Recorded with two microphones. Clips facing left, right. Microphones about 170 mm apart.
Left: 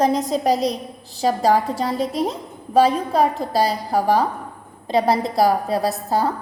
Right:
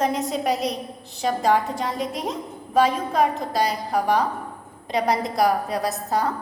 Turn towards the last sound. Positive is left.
turn(degrees=30)  # may be behind; listen again after turning